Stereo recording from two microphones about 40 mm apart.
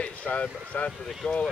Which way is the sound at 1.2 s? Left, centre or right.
Left.